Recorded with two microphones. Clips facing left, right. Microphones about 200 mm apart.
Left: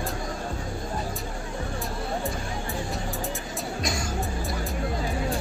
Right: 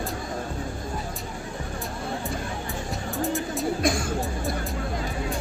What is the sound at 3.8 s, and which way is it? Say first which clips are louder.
Music: right 4 dB; 55° right (ahead or behind).